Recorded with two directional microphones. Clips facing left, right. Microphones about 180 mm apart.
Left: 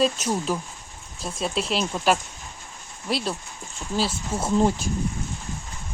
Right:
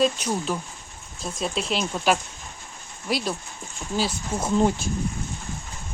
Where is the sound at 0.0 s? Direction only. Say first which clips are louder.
Even; 5° left (ahead or behind).